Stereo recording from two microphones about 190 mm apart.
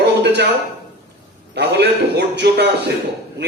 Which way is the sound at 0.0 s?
65° right (ahead or behind).